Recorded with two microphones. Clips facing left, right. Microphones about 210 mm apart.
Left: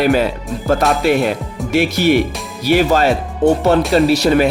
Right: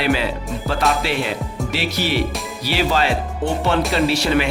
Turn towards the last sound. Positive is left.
turn(degrees=40)  # may be behind; listen again after turning